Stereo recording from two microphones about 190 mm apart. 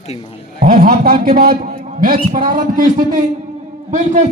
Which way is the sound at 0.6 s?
50° right (ahead or behind).